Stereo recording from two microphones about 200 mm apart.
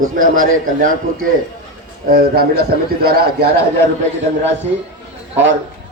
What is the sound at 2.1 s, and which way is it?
A man's voice, 45° right (ahead or behind).